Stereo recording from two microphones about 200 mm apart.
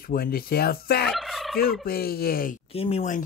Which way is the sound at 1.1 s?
Centre (ahead or behind).